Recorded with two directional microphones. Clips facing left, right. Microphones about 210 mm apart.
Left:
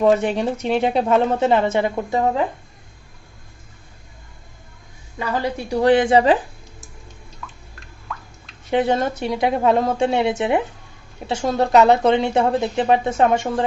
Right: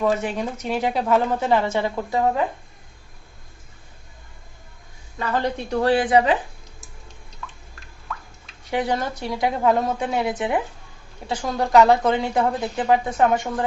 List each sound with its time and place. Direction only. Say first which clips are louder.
0.5 s speech: left 5 dB; 30° left (ahead or behind)
5.2 s a woman's voice: left 1 dB; 10° left (ahead or behind); by 6.3 s 30° left (ahead or behind)
8.1 s drip: left 1 dB; centre (ahead or behind)
8.7 s speech: left 5 dB; 25° left (ahead or behind)